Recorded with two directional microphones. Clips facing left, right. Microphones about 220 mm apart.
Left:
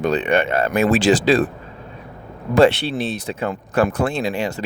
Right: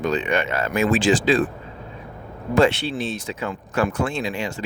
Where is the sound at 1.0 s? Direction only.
40° left (ahead or behind).